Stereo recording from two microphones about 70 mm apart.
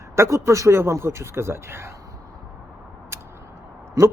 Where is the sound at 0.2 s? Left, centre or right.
Right.